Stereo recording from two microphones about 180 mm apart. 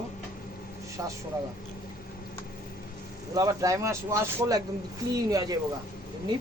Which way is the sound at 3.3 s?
20° right (ahead or behind).